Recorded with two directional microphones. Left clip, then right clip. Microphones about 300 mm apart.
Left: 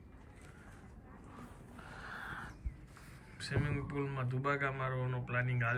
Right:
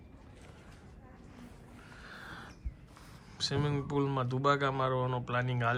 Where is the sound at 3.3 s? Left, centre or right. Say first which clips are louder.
Right 6 dB; centre.